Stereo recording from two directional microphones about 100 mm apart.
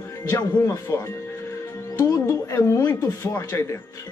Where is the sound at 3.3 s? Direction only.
35° left (ahead or behind).